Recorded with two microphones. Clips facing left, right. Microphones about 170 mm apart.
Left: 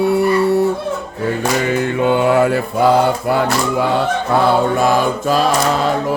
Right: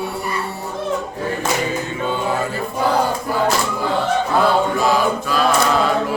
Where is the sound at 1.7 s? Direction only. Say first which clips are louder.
Left 7 dB; 65° left (ahead or behind).